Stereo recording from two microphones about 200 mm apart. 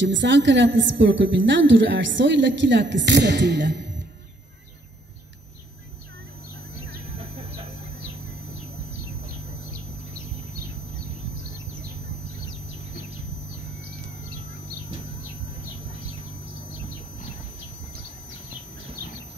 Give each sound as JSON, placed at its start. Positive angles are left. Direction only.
{"t": 0.0, "sound": "a woman's voice", "side_deg": -65}